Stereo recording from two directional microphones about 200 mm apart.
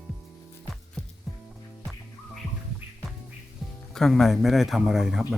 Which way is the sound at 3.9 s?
Centre (ahead or behind).